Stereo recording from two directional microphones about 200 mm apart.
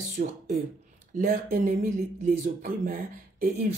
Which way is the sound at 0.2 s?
40° right (ahead or behind).